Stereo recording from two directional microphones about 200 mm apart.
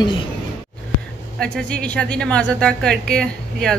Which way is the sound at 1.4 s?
5° left (ahead or behind).